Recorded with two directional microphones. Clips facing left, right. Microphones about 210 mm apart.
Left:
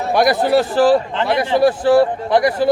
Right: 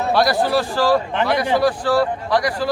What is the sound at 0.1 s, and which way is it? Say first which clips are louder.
A man's voice: left 4 dB; 20° left (ahead or behind).